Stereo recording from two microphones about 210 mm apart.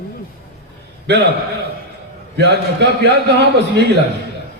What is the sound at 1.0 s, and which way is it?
Speech, 55° right (ahead or behind).